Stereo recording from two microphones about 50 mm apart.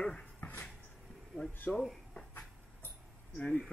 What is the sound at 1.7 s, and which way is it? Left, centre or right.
Speech, centre.